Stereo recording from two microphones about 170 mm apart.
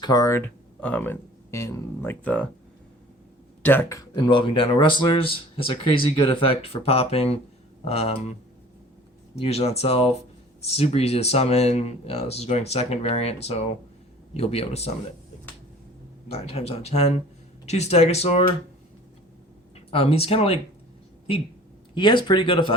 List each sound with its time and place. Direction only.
0.0 s speech: 20° left (ahead or behind)
3.6 s speech: 10° left (ahead or behind); by 8.1 s 35° left (ahead or behind)
9.3 s speech: 40° left (ahead or behind)
16.3 s speech: 35° left (ahead or behind)
19.7 s speech: 35° left (ahead or behind)
21.9 s speech: 30° left (ahead or behind)